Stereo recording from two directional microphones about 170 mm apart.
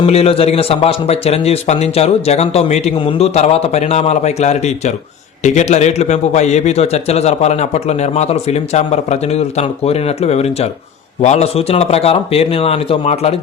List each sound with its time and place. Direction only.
0.0 s a man's voice: 35° left (ahead or behind)